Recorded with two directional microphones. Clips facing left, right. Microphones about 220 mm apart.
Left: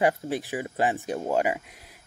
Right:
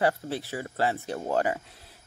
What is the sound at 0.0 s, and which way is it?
Speech, 15° left (ahead or behind).